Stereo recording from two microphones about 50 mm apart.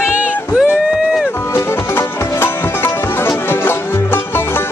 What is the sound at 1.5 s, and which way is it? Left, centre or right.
Music, left.